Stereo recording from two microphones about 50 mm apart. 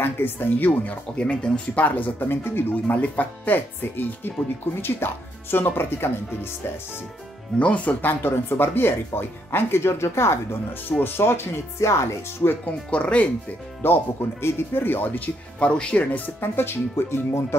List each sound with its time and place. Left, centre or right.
0.0 s speech: left
1.1 s speech: left
2.2 s speech: left
2.7 s speech: left
7.5 s speech: left
12.6 s speech: left
13.8 s speech: left
15.6 s speech: left
16.3 s speech: left
17.1 s speech: left